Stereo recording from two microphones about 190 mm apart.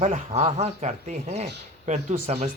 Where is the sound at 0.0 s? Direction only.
35° right (ahead or behind).